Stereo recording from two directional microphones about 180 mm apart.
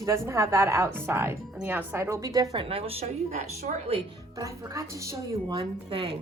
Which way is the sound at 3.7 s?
45° right (ahead or behind).